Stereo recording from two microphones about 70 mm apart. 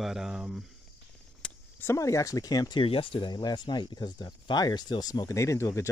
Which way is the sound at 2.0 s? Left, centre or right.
Left.